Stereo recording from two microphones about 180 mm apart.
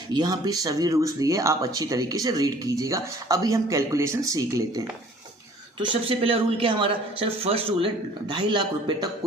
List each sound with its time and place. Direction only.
0.1 s speech: 25° right (ahead or behind)
5.8 s speech: 30° right (ahead or behind)